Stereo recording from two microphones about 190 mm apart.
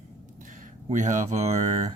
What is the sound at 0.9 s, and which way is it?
Speech, 40° right (ahead or behind).